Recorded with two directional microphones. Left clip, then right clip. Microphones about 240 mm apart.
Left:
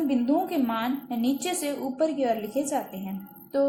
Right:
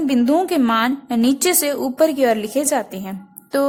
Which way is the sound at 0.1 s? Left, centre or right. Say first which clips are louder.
Right 8 dB; right.